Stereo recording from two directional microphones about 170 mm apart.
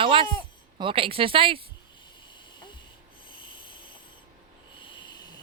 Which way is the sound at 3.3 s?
30° left (ahead or behind).